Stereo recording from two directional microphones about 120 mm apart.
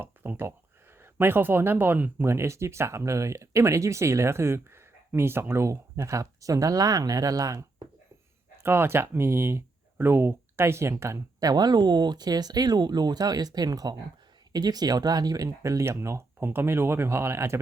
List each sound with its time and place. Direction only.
0.0 s a sound: 15° right (ahead or behind)
1.0 s speech: 20° right (ahead or behind)
8.6 s speech: 20° right (ahead or behind)